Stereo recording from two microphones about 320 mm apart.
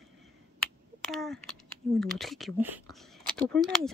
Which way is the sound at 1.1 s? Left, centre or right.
Centre.